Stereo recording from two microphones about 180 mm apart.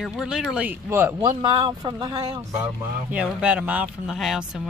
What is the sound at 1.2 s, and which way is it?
Speech, 25° right (ahead or behind).